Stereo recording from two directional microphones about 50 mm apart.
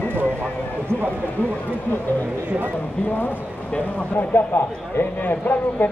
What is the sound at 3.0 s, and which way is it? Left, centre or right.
Speech, left.